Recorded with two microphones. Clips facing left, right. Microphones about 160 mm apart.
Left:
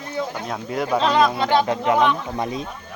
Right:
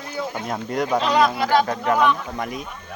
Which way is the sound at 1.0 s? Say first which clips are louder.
Left 2 dB; 30° left (ahead or behind).